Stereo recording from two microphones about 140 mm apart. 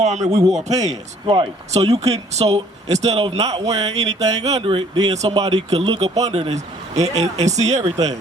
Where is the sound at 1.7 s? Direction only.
50° right (ahead or behind); by 5.1 s 35° right (ahead or behind).